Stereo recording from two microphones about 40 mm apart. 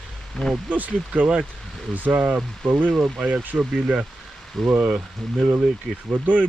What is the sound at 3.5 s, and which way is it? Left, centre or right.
Speech, right.